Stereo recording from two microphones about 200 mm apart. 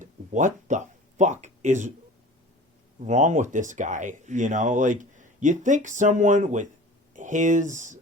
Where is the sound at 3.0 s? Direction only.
35° right (ahead or behind).